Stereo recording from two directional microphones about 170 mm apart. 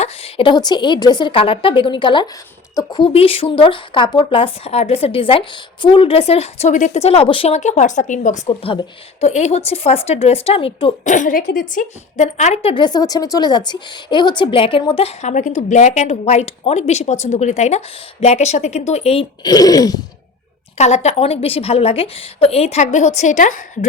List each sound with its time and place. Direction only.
0.0 s a woman's voice: 35° left (ahead or behind)
8.4 s a woman's voice: 30° left (ahead or behind)
11.1 s a woman's voice: 50° left (ahead or behind)
12.7 s a woman's voice: 25° left (ahead or behind)
19.4 s a woman's voice: 20° left (ahead or behind)
20.7 s a woman's voice: 40° left (ahead or behind)